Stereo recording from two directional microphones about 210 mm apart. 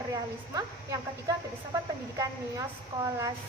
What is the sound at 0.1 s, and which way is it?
Speech, 15° right (ahead or behind).